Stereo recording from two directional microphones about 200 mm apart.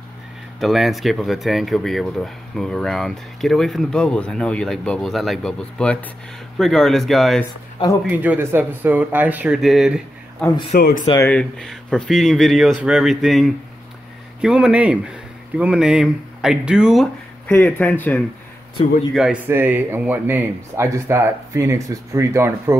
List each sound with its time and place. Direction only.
0.6 s speech: centre (ahead or behind)
10.7 s speech: 50° left (ahead or behind)
11.1 s speech: 10° left (ahead or behind)
19.1 s speech: 5° right (ahead or behind)